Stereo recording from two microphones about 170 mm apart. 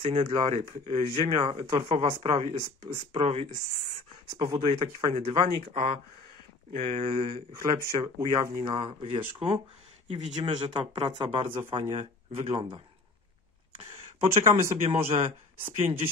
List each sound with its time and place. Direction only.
0.0 s speech: 35° right (ahead or behind)
8.0 s speech: 20° right (ahead or behind)
8.6 s speech: 30° right (ahead or behind)